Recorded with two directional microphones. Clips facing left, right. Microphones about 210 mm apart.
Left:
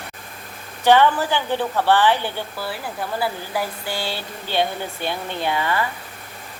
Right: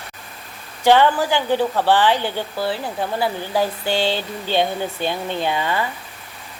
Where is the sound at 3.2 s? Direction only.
25° right (ahead or behind).